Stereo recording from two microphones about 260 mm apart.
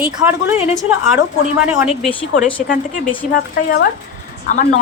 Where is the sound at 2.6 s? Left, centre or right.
Left.